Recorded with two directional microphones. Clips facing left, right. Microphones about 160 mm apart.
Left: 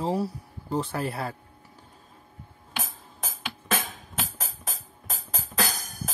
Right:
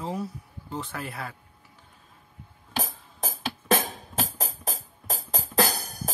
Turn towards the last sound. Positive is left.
turn(degrees=-40)  # may be behind; listen again after turning